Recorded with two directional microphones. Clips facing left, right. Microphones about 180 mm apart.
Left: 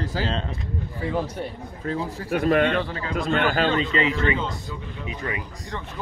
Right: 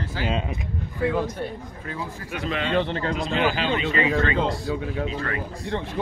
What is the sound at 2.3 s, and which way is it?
A man's voice, 55° left (ahead or behind).